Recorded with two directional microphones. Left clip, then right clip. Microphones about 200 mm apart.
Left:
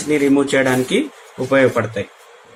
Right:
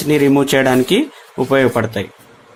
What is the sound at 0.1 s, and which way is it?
Speech, 60° right (ahead or behind).